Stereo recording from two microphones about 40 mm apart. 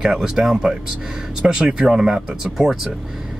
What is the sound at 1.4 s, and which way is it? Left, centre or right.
Speech, right.